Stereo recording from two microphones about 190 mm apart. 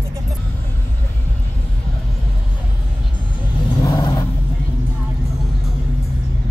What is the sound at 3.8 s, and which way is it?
Vehicle, 20° left (ahead or behind).